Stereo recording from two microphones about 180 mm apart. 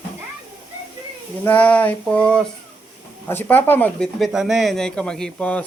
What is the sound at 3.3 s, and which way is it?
Speech, 10° left (ahead or behind).